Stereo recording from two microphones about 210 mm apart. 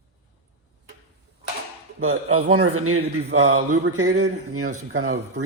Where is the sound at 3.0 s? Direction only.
30° right (ahead or behind).